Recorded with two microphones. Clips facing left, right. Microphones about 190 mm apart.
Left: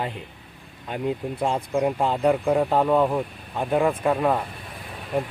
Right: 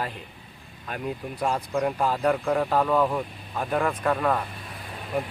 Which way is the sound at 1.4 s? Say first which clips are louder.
Left 2 dB; 25° left (ahead or behind).